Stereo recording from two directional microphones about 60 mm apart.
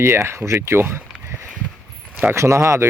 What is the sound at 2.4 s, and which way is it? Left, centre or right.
Speech, right.